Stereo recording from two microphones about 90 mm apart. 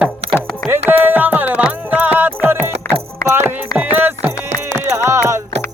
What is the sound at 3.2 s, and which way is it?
Music, 30° left (ahead or behind).